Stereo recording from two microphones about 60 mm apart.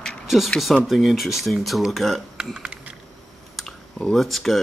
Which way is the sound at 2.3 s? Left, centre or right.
Centre.